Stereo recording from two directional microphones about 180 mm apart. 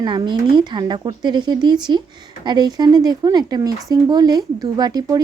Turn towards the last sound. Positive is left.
turn(degrees=-20)  # may be behind; listen again after turning